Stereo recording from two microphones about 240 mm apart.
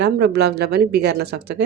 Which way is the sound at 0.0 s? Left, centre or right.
Right.